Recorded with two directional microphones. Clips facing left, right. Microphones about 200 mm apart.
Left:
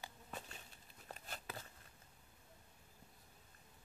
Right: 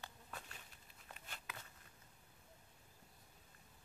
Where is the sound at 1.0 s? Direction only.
40° left (ahead or behind).